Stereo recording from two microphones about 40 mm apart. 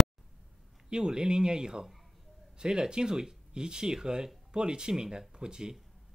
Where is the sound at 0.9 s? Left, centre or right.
Centre.